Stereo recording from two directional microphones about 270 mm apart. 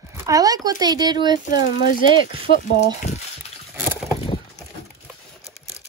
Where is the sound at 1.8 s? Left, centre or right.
Left.